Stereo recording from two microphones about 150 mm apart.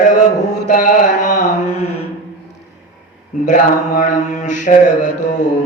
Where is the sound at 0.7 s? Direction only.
65° left (ahead or behind).